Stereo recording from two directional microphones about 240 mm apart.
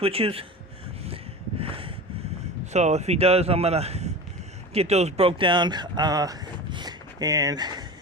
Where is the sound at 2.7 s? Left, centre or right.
Right.